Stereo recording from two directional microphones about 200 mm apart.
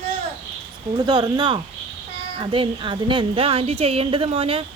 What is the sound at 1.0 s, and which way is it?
A woman's voice, 20° right (ahead or behind).